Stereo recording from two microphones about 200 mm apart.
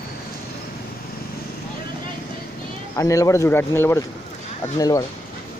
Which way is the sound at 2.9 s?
15° left (ahead or behind).